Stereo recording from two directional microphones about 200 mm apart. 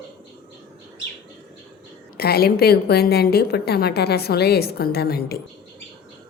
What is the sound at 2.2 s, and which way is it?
A woman's voice, 50° left (ahead or behind).